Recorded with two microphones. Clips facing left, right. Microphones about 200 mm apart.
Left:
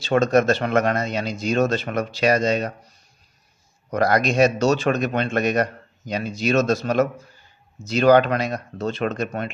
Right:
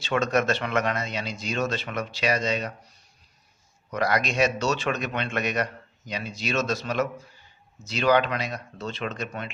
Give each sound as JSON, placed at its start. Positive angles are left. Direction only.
{"t": 0.0, "sound": "a man's voice", "side_deg": 40}
{"t": 3.9, "sound": "a man's voice", "side_deg": 45}